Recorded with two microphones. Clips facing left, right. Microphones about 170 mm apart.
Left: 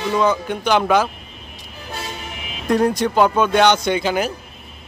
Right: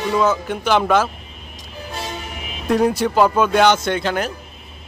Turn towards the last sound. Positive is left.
turn(degrees=5)  # may be behind; listen again after turning